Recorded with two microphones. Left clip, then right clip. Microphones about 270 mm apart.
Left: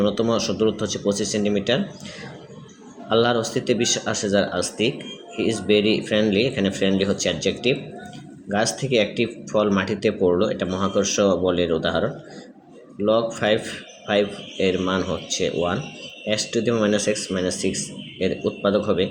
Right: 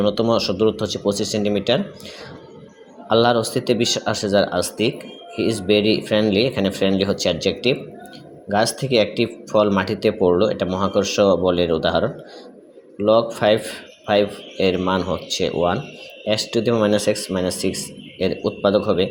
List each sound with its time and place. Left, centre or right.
0.0 s speech: centre
3.1 s speech: centre